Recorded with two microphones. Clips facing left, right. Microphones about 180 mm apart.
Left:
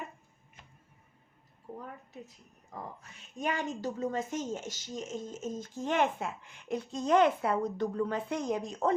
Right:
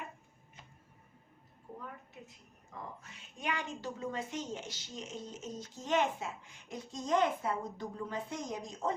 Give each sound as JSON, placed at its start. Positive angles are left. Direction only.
{"t": 3.0, "sound": "a woman's voice", "side_deg": 45}